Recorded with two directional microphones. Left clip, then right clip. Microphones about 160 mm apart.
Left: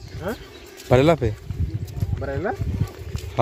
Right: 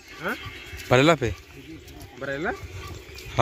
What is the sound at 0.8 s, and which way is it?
Speech, 15° left (ahead or behind).